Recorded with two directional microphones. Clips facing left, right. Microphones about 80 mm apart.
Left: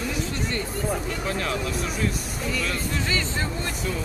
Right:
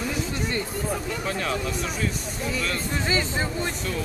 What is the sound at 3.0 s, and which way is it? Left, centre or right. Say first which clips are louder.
Speech: right 2 dB; centre.